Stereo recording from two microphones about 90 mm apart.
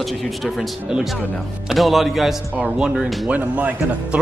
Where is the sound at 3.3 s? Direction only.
15° right (ahead or behind).